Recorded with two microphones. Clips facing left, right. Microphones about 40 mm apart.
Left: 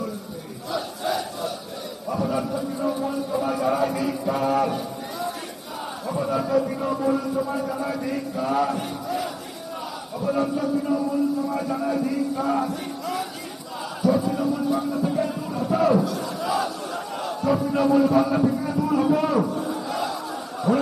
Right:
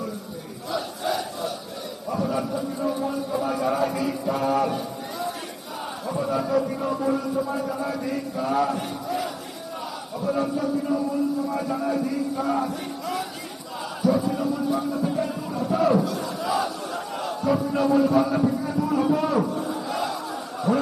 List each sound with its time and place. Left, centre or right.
0.7 s battle cry: centre
2.0 s a sound: centre
6.1 s a man's voice: centre
10.2 s speech: centre
12.6 s music: centre
14.0 s speech: centre
15.8 s battle cry: centre
18.3 s speech: centre
19.5 s battle cry: centre